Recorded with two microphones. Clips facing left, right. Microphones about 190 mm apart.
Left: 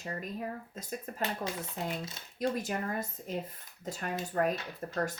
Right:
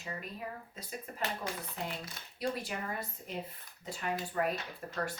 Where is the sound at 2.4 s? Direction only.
45° left (ahead or behind).